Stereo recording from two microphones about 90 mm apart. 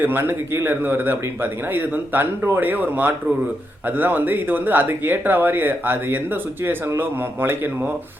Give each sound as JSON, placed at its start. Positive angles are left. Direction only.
{"t": 0.0, "sound": "speech", "side_deg": -25}